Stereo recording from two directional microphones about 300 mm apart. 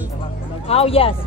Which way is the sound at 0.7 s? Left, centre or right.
Centre.